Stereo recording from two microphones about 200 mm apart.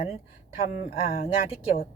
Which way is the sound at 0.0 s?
30° left (ahead or behind).